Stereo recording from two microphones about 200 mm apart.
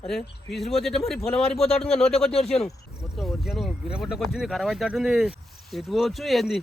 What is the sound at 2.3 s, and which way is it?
Speech, 30° left (ahead or behind).